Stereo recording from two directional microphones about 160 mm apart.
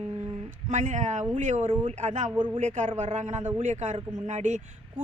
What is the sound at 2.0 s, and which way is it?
Speech, 50° right (ahead or behind).